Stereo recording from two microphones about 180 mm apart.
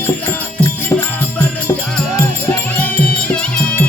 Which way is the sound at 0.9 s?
15° left (ahead or behind).